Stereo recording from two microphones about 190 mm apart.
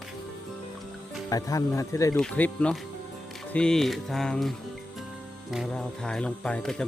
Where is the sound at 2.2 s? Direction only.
5° left (ahead or behind).